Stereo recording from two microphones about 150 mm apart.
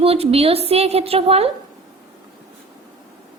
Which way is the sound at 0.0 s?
40° right (ahead or behind).